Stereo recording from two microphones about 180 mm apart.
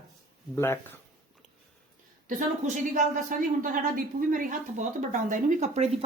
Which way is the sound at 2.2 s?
45° right (ahead or behind).